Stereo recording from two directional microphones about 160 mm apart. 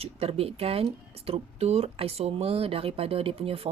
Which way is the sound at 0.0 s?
40° right (ahead or behind).